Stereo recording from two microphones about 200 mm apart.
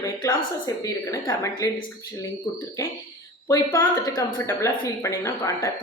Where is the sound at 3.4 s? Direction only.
15° left (ahead or behind).